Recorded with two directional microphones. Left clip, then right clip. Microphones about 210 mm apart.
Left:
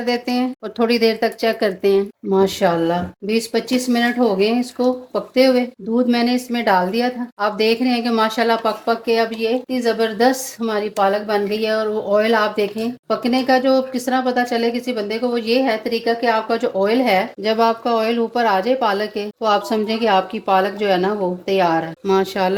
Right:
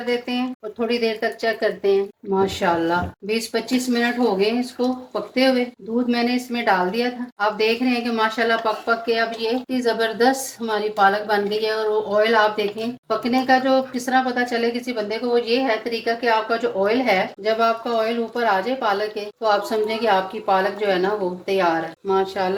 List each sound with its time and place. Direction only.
0.0 s speech: 55° left (ahead or behind)